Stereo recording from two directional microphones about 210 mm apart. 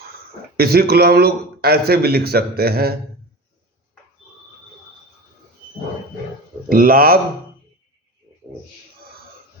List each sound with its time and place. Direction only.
0.5 s speech: 45° right (ahead or behind)
6.7 s speech: 45° right (ahead or behind)